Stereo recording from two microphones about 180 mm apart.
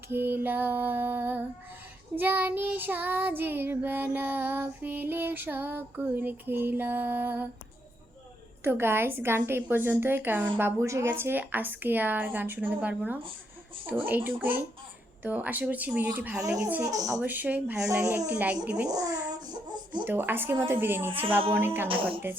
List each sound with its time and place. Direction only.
0.1 s child singing: 10° right (ahead or behind)
8.6 s child singing: 10° right (ahead or behind)
18.9 s speech: 20° right (ahead or behind)
20.1 s child singing: 10° right (ahead or behind)